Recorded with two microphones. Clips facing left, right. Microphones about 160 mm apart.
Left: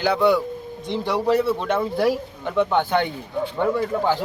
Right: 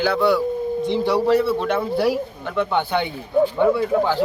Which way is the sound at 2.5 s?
10° left (ahead or behind).